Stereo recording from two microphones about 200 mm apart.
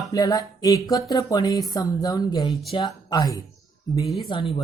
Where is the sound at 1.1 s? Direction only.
20° left (ahead or behind).